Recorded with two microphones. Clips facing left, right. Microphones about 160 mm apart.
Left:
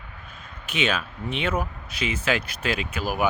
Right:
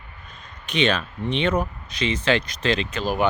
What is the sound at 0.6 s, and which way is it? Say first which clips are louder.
Speech: right 4 dB; 5° left (ahead or behind).